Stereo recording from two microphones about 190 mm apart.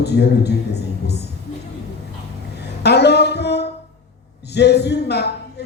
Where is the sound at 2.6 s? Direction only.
60° left (ahead or behind).